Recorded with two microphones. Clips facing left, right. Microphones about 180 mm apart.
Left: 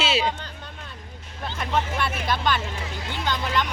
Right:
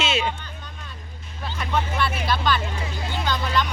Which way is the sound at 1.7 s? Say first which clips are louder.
Right 1 dB; 20° left (ahead or behind).